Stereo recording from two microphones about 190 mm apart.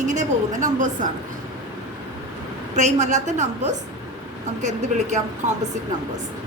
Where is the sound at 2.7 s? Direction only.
40° right (ahead or behind).